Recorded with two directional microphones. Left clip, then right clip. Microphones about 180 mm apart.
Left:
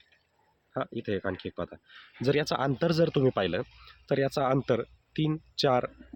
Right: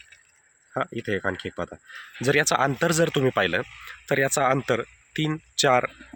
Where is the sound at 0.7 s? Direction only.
25° right (ahead or behind).